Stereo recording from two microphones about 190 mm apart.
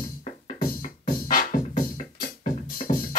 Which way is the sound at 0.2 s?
50° left (ahead or behind).